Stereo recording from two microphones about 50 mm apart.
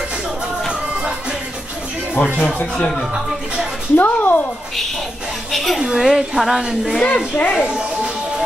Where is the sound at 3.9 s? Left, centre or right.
Left.